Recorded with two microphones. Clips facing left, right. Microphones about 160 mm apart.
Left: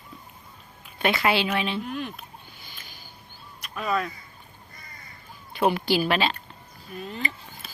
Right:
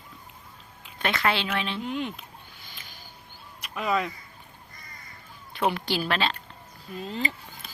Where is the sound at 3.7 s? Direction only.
15° right (ahead or behind).